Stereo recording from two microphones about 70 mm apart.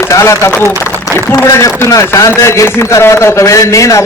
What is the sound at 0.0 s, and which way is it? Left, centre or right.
A man's voice, left.